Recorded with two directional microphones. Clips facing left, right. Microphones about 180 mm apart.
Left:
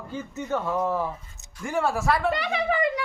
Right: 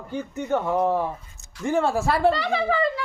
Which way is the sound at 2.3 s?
15° left (ahead or behind).